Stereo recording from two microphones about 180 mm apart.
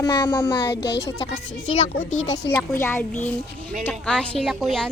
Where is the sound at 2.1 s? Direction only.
90° left.